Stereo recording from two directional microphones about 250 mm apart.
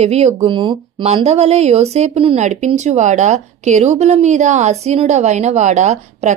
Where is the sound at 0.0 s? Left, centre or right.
Right.